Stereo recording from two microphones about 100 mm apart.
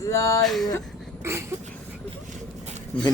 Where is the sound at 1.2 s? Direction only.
25° right (ahead or behind).